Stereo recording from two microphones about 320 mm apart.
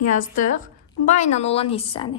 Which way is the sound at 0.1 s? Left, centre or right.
Left.